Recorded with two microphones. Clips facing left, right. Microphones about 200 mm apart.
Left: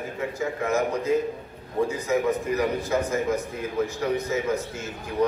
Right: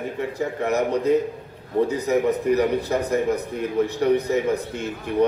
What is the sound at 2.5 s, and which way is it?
Speech, 35° right (ahead or behind).